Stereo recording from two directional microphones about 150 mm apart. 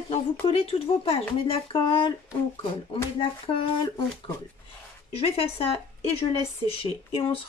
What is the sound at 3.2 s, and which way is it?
Speech, 30° left (ahead or behind).